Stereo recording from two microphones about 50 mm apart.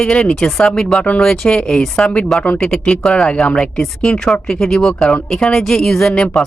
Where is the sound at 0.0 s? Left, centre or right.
Centre.